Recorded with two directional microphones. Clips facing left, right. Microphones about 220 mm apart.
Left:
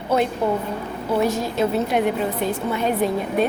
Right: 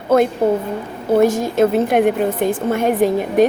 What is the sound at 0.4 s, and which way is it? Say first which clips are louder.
A woman's voice: right 5 dB; 45° right (ahead or behind).